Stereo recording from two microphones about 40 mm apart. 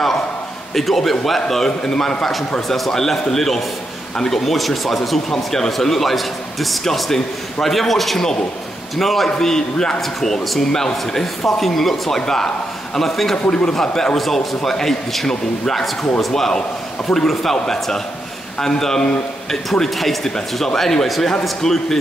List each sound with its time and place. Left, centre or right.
0.7 s a man's voice: centre
5.3 s a man's voice: centre
13.5 s a man's voice: left
13.7 s a man's voice: centre